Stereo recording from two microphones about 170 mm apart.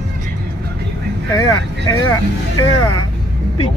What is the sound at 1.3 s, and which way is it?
Speech, 20° left (ahead or behind).